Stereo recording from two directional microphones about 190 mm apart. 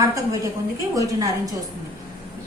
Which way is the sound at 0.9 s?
15° right (ahead or behind).